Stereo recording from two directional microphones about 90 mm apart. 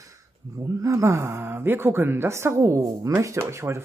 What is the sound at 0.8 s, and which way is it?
A woman's voice, 35° right (ahead or behind).